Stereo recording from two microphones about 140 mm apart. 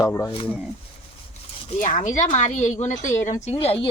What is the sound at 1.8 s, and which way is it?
A woman's voice, 65° left (ahead or behind).